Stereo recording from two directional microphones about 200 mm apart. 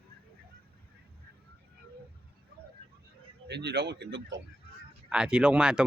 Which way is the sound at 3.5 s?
55° right (ahead or behind).